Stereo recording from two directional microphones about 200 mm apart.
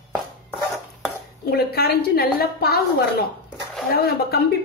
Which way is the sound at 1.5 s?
50° left (ahead or behind).